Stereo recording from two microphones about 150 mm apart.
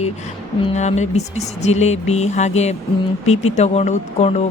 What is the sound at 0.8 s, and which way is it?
Speech, 50° left (ahead or behind).